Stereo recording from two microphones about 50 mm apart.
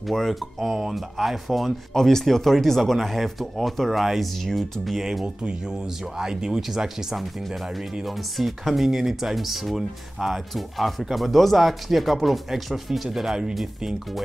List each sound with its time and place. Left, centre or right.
0.0 s speech: centre
5.2 s speech: centre